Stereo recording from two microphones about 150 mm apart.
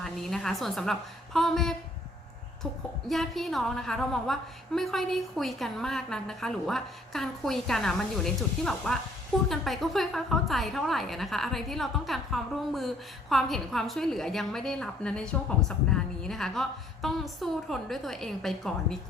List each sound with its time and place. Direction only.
0.0 s a woman's voice: centre (ahead or behind)
3.1 s a woman's voice: centre (ahead or behind)